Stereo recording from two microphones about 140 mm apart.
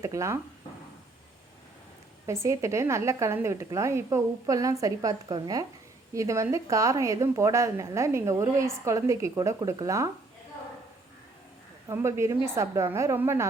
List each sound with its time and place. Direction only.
0.0 s speech: 20° right (ahead or behind)
2.2 s a woman's voice: 20° right (ahead or behind)
11.9 s a woman's voice: 20° right (ahead or behind)